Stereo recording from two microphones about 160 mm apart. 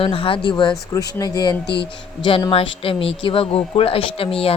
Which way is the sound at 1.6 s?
90° left.